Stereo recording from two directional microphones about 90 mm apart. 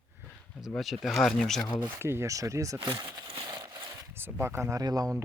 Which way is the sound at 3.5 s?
50° right (ahead or behind).